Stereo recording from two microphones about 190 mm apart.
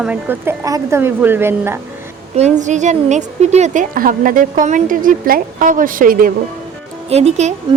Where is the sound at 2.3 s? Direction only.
40° right (ahead or behind).